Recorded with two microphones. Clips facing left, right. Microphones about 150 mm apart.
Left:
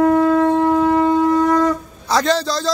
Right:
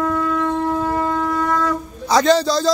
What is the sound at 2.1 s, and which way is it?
Speech, centre (ahead or behind).